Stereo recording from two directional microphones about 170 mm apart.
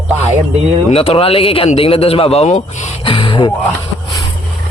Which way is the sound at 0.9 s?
35° left (ahead or behind).